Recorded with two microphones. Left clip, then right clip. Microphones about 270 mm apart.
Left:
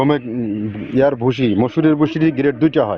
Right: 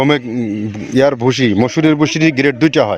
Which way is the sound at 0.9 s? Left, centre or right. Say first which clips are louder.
Right 3 dB; right.